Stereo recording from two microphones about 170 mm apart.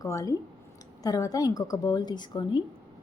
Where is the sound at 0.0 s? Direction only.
20° left (ahead or behind).